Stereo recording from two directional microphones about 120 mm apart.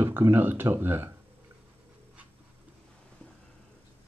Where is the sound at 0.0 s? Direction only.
20° right (ahead or behind).